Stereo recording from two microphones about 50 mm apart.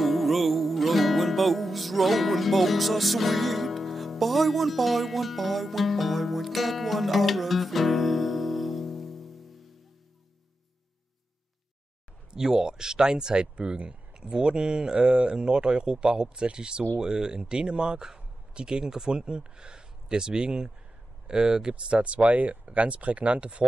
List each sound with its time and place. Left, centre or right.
0.0 s music: centre
12.3 s speech: centre